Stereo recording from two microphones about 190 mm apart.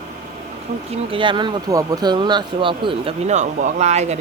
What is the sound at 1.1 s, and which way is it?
Speech, 25° right (ahead or behind).